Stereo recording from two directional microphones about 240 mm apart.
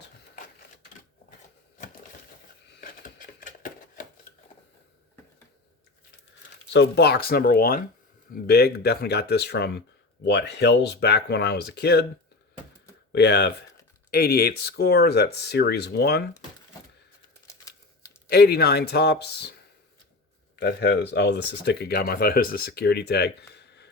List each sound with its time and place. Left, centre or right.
3.0 s typewriter: left
6.7 s speech: left
13.1 s speech: left
17.5 s a sound: centre
18.3 s speech: left
20.6 s speech: left